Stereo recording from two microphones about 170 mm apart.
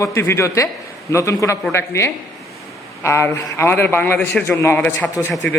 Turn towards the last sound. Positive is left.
turn(degrees=10)  # may be behind; listen again after turning